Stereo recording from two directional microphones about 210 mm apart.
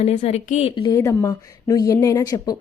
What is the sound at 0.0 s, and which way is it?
Speech, 30° left (ahead or behind).